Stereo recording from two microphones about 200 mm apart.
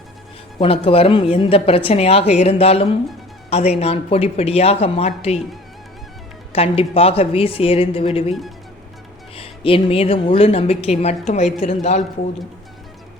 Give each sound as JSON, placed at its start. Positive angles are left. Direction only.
{"t": 0.6, "sound": "a woman's voice", "side_deg": 30}
{"t": 6.5, "sound": "a woman's voice", "side_deg": 30}
{"t": 8.3, "sound": "speech", "side_deg": 0}
{"t": 9.3, "sound": "a woman's voice", "side_deg": 30}